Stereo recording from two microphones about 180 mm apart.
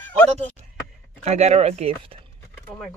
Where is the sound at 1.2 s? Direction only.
40° right (ahead or behind).